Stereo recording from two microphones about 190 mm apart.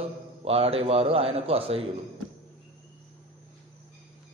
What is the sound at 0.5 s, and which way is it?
A man's voice, 30° right (ahead or behind).